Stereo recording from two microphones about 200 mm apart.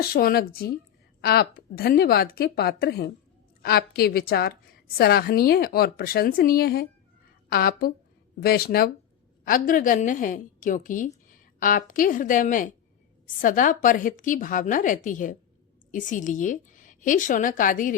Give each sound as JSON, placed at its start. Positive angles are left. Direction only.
{"t": 0.0, "sound": "a woman's voice", "side_deg": 50}